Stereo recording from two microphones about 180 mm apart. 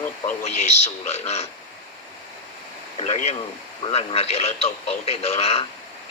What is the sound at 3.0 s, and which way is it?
Speech, 40° left (ahead or behind).